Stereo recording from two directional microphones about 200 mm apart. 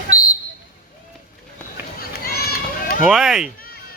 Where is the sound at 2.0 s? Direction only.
50° left (ahead or behind).